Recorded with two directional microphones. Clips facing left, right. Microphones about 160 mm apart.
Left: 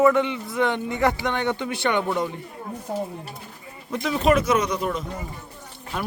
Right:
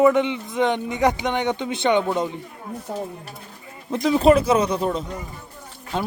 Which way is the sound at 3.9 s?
30° right (ahead or behind).